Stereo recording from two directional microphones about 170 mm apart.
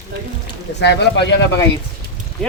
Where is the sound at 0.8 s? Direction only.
90° left.